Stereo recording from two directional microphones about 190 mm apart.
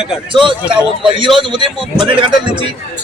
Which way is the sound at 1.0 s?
25° right (ahead or behind).